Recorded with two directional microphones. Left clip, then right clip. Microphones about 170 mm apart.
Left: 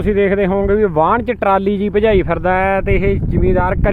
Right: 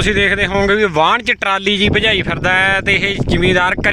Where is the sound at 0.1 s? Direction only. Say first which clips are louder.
Left 1 dB; 15° right (ahead or behind).